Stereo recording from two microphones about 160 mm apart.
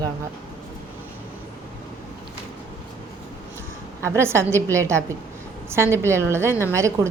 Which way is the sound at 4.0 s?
15° right (ahead or behind).